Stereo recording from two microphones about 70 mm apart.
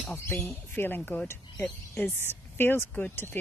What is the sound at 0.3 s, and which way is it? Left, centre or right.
Speech, left.